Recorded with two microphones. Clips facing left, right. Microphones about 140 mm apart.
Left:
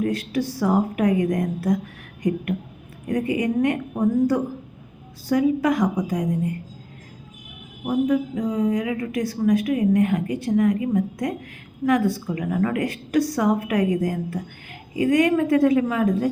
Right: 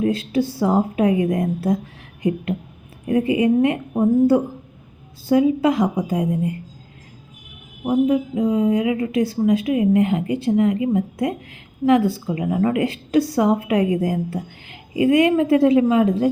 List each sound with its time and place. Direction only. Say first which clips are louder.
0.0 s a woman's voice: right 4 dB; 25° right (ahead or behind)
7.9 s a woman's voice: right 3 dB; 25° right (ahead or behind)